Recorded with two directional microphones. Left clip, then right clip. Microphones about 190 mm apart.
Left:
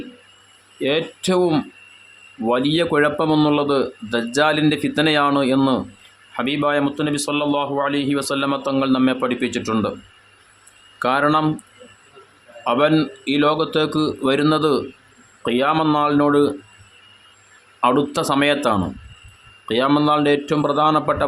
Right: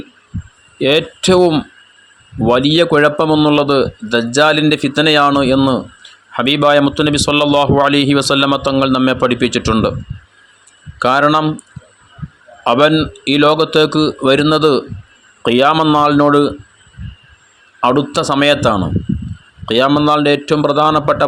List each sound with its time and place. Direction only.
0.8 s a man's voice: 25° right (ahead or behind)
2.5 s a man's voice: 25° right (ahead or behind)
3.2 s a man's voice: 15° right (ahead or behind)
11.0 s a man's voice: 25° right (ahead or behind)
12.6 s a man's voice: 30° right (ahead or behind)
17.7 s a man's voice: 20° right (ahead or behind)